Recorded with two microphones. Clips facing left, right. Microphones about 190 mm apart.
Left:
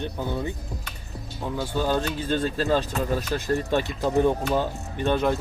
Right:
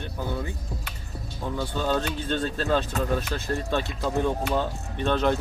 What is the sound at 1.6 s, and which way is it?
A man's voice, 10° left (ahead or behind).